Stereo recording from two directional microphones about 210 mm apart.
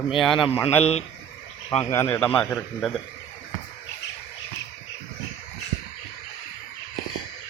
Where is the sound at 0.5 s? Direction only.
30° left (ahead or behind).